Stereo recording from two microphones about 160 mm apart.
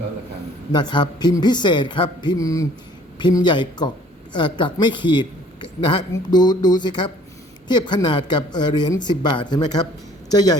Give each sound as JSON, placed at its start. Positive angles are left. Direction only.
{"t": 0.7, "sound": "speech", "side_deg": 30}